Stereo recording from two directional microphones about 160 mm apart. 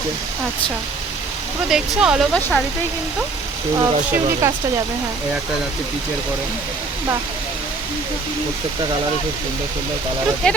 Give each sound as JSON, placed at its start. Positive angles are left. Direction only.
{"t": 1.7, "sound": "speech", "side_deg": -5}
{"t": 3.8, "sound": "speech", "side_deg": -20}
{"t": 10.4, "sound": "speech", "side_deg": 5}